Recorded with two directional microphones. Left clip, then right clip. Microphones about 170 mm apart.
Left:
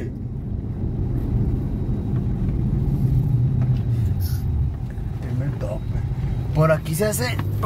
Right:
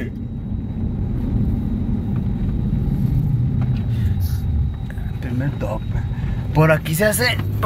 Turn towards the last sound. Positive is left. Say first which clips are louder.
# right 6 dB
turn(degrees=5)  # may be behind; listen again after turning